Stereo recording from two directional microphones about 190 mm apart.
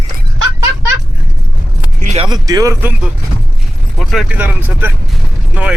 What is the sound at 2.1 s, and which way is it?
Speech, 20° right (ahead or behind).